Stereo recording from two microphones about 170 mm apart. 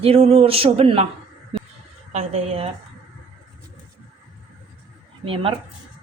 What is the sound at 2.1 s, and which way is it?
Speech, 40° right (ahead or behind).